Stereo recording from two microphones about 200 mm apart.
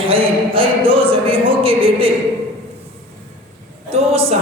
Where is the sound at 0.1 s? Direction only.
30° right (ahead or behind).